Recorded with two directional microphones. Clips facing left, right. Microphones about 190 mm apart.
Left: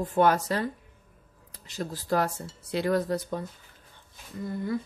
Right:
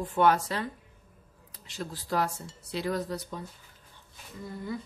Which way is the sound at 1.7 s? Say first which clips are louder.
Left 5 dB; 45° left (ahead or behind).